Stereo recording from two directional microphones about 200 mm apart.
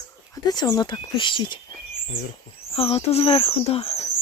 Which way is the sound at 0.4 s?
20° left (ahead or behind).